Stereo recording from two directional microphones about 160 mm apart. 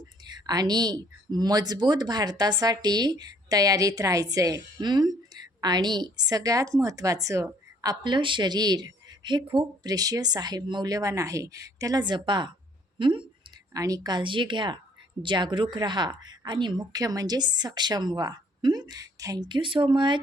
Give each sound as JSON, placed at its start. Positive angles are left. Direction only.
{"t": 0.4, "sound": "speech", "side_deg": -25}